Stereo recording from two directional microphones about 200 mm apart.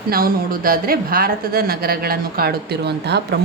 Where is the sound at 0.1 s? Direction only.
45° right (ahead or behind).